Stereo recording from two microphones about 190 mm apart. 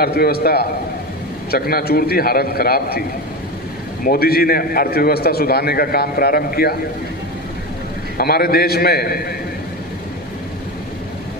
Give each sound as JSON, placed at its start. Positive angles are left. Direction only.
{"t": 0.0, "sound": "a man's voice", "side_deg": 55}
{"t": 4.0, "sound": "a man's voice", "side_deg": 50}
{"t": 8.2, "sound": "a man's voice", "side_deg": 55}